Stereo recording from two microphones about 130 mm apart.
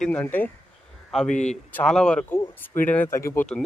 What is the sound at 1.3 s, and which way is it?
Speech, 65° left (ahead or behind).